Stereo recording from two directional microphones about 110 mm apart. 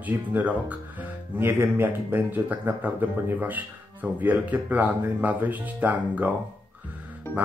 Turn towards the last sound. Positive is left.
turn(degrees=20)  # may be behind; listen again after turning